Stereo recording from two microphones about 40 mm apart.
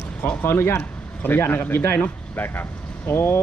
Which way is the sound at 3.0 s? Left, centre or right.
Left.